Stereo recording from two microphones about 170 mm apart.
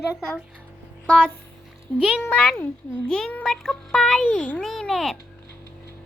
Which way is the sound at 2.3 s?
10° left (ahead or behind).